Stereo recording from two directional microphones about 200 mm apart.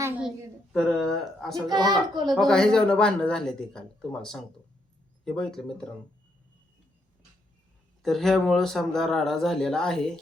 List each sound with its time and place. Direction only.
0.0 s a child's voice: 5° right (ahead or behind)
1.8 s a child's voice: 20° right (ahead or behind)
2.3 s speech: centre (ahead or behind)
8.0 s speech: centre (ahead or behind)